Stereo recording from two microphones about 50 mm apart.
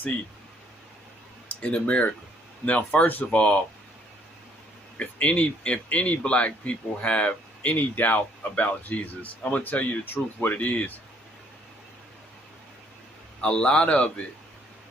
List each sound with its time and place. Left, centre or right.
1.6 s a man's voice: left
4.9 s a man's voice: left
13.4 s a man's voice: left